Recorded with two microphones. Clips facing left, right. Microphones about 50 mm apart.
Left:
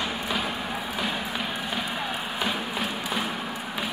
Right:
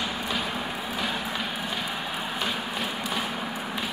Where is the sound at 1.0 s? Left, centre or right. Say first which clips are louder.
Even; centre.